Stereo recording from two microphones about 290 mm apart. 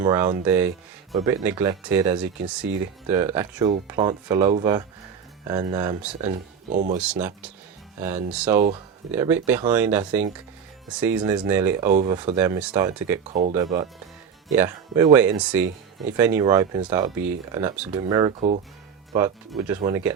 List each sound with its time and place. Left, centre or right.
0.0 s speech: centre
2.6 s speech: right
3.1 s speech: centre
6.3 s speech: right
7.0 s speech: centre
11.9 s speech: right
12.1 s speech: centre
13.2 s speech: right
13.5 s speech: centre